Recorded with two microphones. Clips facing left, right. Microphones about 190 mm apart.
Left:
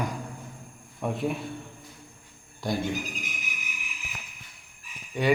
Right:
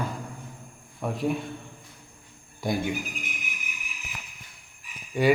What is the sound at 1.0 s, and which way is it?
Speech, centre (ahead or behind).